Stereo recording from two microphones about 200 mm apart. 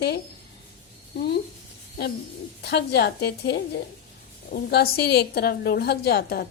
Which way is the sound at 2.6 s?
55° left (ahead or behind).